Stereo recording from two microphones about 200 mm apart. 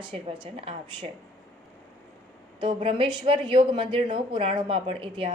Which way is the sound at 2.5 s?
25° right (ahead or behind).